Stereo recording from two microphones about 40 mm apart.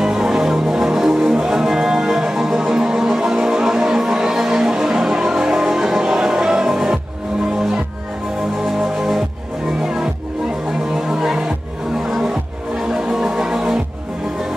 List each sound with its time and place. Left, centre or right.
0.0 s music: centre
8.7 s music: centre
11.0 s music: centre